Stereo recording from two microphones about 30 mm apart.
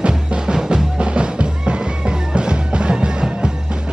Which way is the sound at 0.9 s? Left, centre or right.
Right.